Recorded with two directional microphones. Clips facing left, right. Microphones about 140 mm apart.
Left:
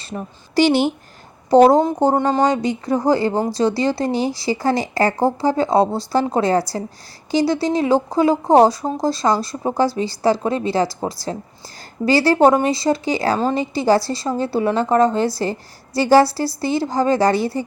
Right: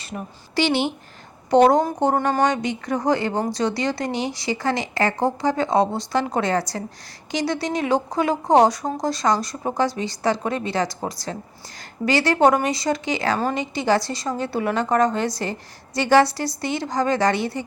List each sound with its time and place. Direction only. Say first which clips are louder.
0.5 s speech: left 6 dB; 40° left (ahead or behind)